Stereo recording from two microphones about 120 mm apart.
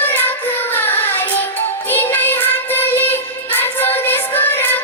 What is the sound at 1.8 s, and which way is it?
Music, 15° left (ahead or behind).